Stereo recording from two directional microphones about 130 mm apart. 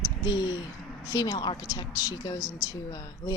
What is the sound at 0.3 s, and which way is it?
A woman's voice, 30° left (ahead or behind).